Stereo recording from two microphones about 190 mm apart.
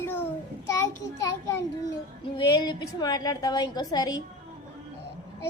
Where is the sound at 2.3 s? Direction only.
25° left (ahead or behind).